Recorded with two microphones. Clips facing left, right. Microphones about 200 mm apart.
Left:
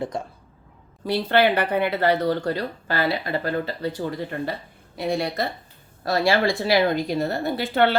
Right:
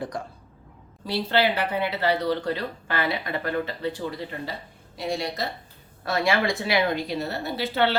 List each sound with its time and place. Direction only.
0.1 s speech: 25° left (ahead or behind)
1.0 s a woman's voice: 55° left (ahead or behind)
6.1 s speech: 35° left (ahead or behind); by 7.9 s 50° left (ahead or behind)